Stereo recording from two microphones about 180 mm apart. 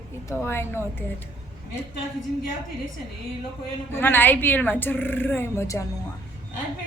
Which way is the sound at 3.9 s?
10° left (ahead or behind).